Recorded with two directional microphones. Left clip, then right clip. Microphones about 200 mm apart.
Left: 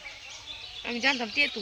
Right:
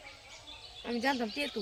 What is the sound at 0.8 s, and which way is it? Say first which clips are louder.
Speech: left 5 dB; 30° right (ahead or behind).